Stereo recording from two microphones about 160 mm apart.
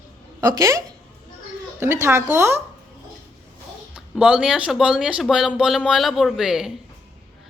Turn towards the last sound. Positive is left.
turn(degrees=0)  # may be behind; listen again after turning